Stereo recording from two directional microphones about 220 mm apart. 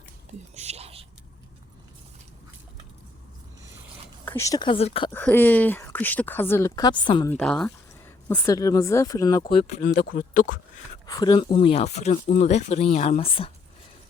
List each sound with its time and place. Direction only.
0.5 s whispering: 30° right (ahead or behind)
4.3 s speech: 15° left (ahead or behind)
5.1 s speech: 10° left (ahead or behind)
7.3 s speech: 5° left (ahead or behind); by 9.9 s 30° left (ahead or behind)
9.9 s speech: 45° left (ahead or behind)
11.0 s speech: 20° left (ahead or behind)